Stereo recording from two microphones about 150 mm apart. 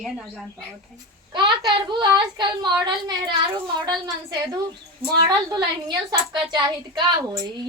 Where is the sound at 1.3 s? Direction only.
30° right (ahead or behind).